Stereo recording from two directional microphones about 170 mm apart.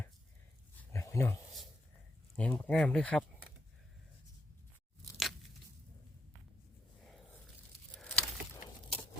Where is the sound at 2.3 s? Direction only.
15° left (ahead or behind).